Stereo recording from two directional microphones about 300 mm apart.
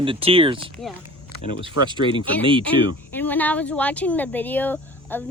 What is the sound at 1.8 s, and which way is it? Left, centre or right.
Speech, centre.